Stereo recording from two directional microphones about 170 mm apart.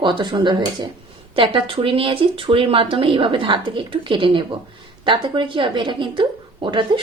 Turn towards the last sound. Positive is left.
turn(degrees=-30)  # may be behind; listen again after turning